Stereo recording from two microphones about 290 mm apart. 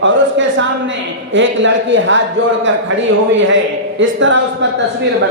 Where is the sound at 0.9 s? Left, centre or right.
Right.